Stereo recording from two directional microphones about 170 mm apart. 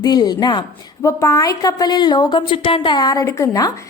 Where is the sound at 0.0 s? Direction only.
25° left (ahead or behind).